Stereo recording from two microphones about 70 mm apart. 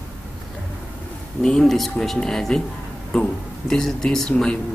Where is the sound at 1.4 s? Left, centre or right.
Centre.